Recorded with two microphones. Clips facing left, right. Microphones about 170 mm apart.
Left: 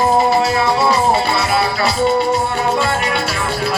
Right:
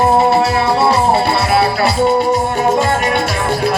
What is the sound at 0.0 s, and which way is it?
Music, 65° right (ahead or behind).